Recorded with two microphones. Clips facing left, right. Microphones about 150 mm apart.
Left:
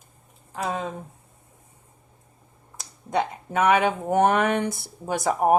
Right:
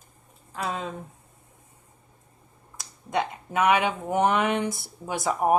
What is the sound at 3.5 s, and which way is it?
Speech, 45° left (ahead or behind).